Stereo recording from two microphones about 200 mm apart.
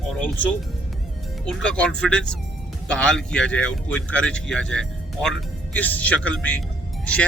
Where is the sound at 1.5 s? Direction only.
5° left (ahead or behind).